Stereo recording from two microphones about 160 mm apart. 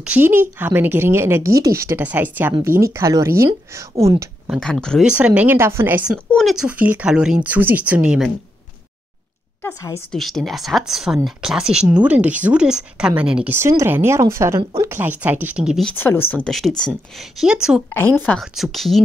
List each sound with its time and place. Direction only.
0.0 s speech: 10° right (ahead or behind)
4.5 s speech: 5° left (ahead or behind)
5.0 s speech: 10° right (ahead or behind)
6.3 s speech: centre (ahead or behind)
10.1 s speech: centre (ahead or behind)
16.0 s speech: 10° left (ahead or behind)